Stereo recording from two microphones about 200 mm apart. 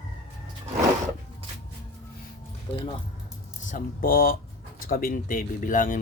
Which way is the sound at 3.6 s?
40° left (ahead or behind).